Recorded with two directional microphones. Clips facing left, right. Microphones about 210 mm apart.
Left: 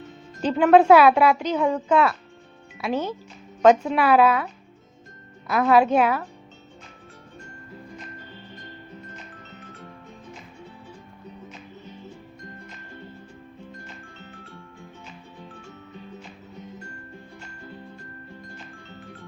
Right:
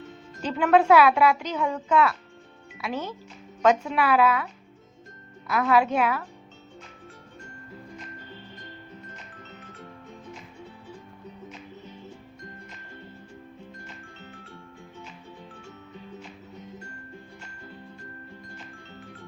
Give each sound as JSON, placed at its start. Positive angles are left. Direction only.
{"t": 0.4, "sound": "a woman's voice", "side_deg": 30}
{"t": 5.5, "sound": "a woman's voice", "side_deg": 30}